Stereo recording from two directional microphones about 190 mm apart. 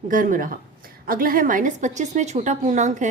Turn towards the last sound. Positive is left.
turn(degrees=-40)  # may be behind; listen again after turning